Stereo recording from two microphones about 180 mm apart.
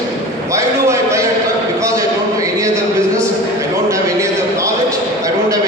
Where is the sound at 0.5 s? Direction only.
15° right (ahead or behind).